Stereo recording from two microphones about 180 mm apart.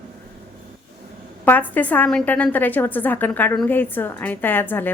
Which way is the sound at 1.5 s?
10° left (ahead or behind).